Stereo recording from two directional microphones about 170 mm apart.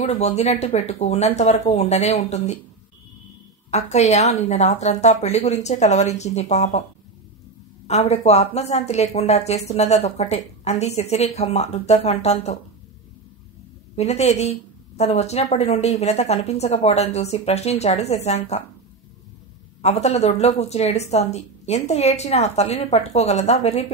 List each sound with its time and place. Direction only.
0.0 s speech: 40° left (ahead or behind)
3.7 s speech: 40° left (ahead or behind)
7.8 s speech: 40° left (ahead or behind)
13.9 s speech: 40° left (ahead or behind)
19.8 s speech: 40° left (ahead or behind)